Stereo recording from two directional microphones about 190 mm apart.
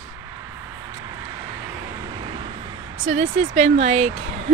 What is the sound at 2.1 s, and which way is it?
Vehicle, 25° right (ahead or behind).